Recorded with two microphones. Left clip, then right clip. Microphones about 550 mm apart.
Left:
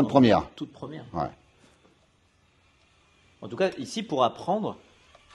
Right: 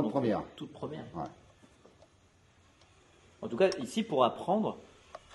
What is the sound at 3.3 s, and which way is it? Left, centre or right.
A man's voice, left.